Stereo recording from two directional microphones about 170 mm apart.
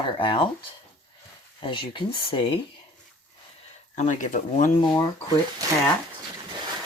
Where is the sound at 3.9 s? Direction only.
45° left (ahead or behind).